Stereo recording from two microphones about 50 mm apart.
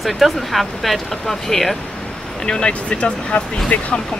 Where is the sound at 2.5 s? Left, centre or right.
Centre.